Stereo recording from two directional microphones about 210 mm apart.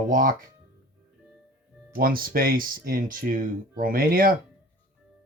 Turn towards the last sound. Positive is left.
turn(degrees=-45)  # may be behind; listen again after turning